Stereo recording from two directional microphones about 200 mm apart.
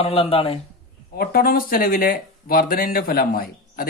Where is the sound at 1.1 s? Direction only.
50° left (ahead or behind).